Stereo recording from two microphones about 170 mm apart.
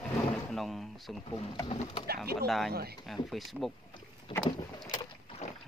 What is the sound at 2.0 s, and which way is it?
Speech, 65° right (ahead or behind).